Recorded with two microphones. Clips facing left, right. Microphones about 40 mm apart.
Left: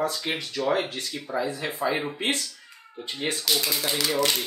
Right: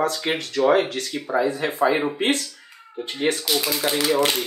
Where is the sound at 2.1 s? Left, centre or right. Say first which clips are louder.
Right 5 dB; right.